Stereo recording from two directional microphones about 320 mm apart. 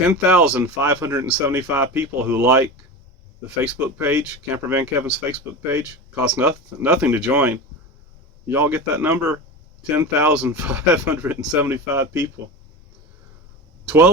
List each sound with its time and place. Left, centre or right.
0.0 s speech: centre
3.6 s speech: centre
13.8 s speech: centre